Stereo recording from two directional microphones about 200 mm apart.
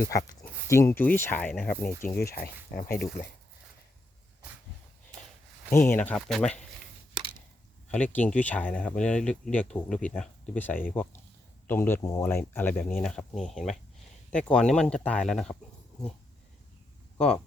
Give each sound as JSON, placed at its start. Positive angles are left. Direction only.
{"t": 0.0, "sound": "speech", "side_deg": 15}
{"t": 2.0, "sound": "speech", "side_deg": 45}
{"t": 5.7, "sound": "speech", "side_deg": 10}
{"t": 7.9, "sound": "speech", "side_deg": 5}